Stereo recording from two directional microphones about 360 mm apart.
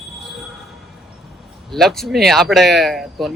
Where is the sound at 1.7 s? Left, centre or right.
Centre.